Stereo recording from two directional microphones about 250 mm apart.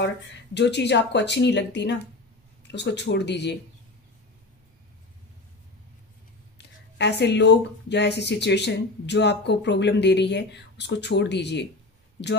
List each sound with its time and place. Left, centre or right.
0.0 s speech: left
6.6 s speech: left